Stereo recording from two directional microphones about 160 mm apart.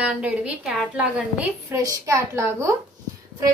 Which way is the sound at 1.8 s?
20° right (ahead or behind).